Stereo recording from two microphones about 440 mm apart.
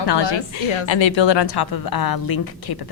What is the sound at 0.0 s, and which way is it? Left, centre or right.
A woman's voice, left.